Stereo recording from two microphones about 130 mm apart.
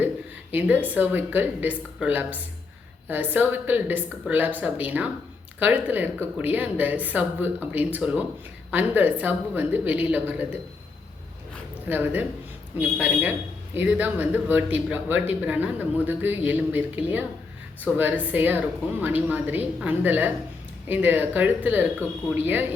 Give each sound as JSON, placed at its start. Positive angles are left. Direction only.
{"t": 0.5, "sound": "speech", "side_deg": -15}
{"t": 11.9, "sound": "speech", "side_deg": -15}